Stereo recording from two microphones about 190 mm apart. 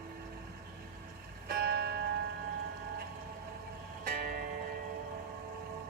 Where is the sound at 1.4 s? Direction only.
55° right (ahead or behind).